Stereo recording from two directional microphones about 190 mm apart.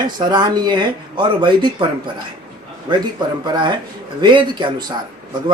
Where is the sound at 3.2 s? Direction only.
25° right (ahead or behind).